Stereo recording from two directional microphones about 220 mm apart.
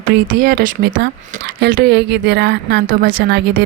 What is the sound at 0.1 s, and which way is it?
Speech, 40° right (ahead or behind).